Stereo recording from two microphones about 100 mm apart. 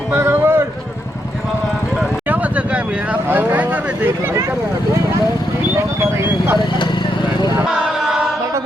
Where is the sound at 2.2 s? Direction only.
15° right (ahead or behind).